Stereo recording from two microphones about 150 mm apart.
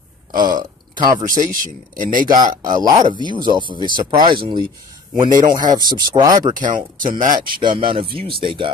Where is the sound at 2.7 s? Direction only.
25° right (ahead or behind).